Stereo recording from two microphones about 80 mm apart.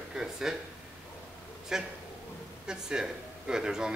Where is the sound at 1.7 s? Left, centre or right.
Centre.